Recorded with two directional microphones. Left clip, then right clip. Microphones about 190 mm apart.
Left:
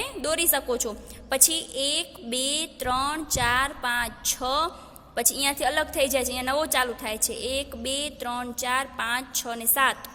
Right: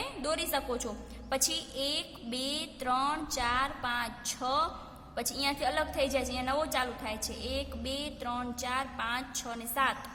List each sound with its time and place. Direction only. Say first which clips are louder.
0.0 s a woman's voice: left 7 dB; 25° left (ahead or behind)